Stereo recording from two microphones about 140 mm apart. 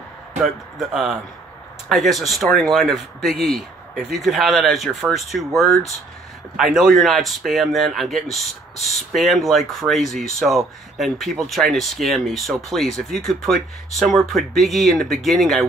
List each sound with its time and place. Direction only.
0.4 s speech: centre (ahead or behind)